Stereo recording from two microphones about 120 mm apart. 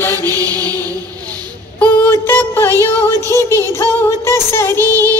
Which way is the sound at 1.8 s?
20° left (ahead or behind).